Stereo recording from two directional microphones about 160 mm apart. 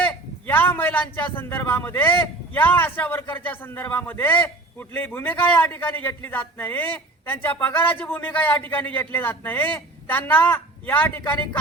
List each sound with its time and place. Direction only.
0.0 s a man's voice: 10° left (ahead or behind)